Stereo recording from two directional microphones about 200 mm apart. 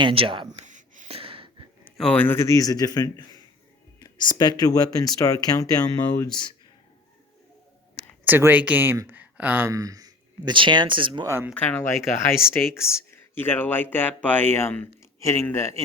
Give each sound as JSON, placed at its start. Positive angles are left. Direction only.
{"t": 0.0, "sound": "a sound", "side_deg": -25}
{"t": 1.8, "sound": "speech", "side_deg": 5}
{"t": 8.2, "sound": "speech", "side_deg": -10}
{"t": 11.5, "sound": "speech", "side_deg": 10}